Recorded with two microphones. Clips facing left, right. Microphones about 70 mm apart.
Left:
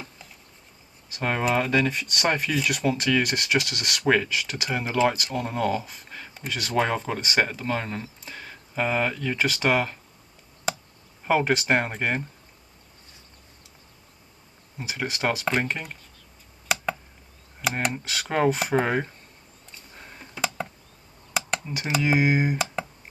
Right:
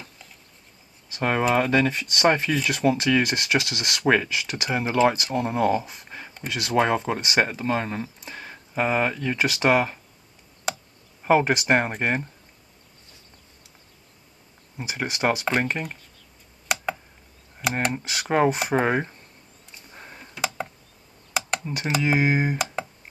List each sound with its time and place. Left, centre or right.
1.5 s speech: centre
11.2 s speech: centre
14.8 s speech: centre
17.6 s speech: centre
19.9 s tick: centre
21.3 s a sound: centre
21.7 s speech: centre